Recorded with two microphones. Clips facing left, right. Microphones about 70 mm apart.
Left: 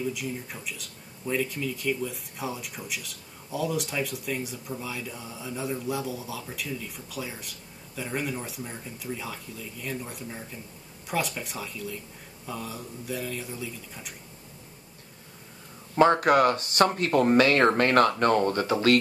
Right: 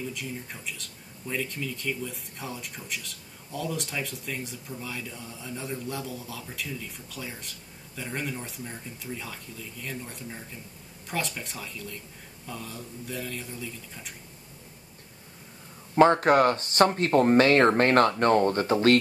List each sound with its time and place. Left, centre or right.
0.1 s speech: centre
16.2 s speech: right